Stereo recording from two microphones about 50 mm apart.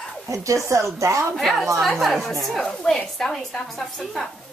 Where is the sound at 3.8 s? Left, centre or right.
Centre.